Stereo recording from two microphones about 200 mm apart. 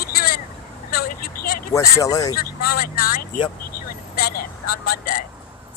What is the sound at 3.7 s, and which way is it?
Vehicle, 50° left (ahead or behind).